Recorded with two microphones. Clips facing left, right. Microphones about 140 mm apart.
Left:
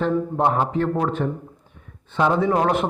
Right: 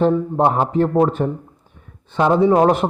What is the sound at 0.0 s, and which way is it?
A man's voice, 30° right (ahead or behind).